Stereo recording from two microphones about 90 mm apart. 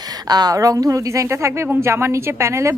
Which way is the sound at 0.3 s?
45° right (ahead or behind).